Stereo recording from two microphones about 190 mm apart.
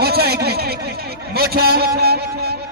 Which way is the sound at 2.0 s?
55° right (ahead or behind).